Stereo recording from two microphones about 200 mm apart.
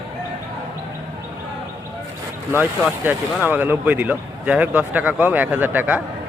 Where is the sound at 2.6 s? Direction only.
10° right (ahead or behind).